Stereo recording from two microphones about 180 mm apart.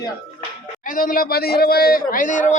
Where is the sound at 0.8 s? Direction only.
50° left (ahead or behind).